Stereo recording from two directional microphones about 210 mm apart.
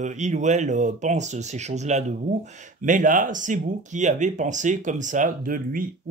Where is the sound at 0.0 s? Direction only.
35° right (ahead or behind).